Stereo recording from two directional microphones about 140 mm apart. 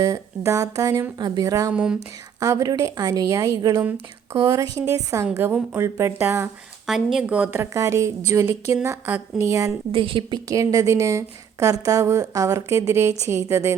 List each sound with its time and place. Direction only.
0.0 s a woman's voice: 25° right (ahead or behind)
1.7 s speech: 5° right (ahead or behind)
2.4 s a woman's voice: 25° right (ahead or behind)
6.8 s a woman's voice: 5° right (ahead or behind); by 9.7 s 20° right (ahead or behind)
9.9 s a woman's voice: 40° right (ahead or behind); by 13.7 s 20° right (ahead or behind)